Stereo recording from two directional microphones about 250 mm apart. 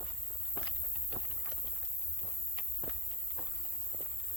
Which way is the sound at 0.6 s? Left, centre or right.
Centre.